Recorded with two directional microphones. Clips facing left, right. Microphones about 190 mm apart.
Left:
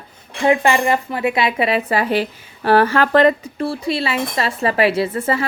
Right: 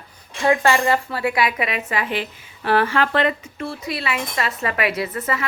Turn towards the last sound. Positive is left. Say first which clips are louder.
# left 6 dB
turn(degrees=30)  # may be behind; listen again after turning